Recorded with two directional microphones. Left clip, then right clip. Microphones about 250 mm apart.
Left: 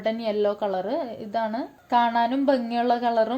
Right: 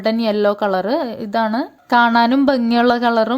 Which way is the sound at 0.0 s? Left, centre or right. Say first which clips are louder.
Right 7 dB; right.